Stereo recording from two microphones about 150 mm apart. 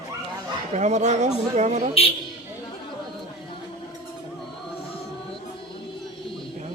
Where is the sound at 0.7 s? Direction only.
50° right (ahead or behind).